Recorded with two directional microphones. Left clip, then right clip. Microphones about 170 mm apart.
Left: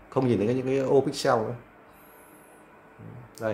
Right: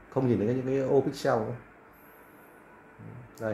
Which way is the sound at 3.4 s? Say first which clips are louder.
Left 3 dB; 15° left (ahead or behind).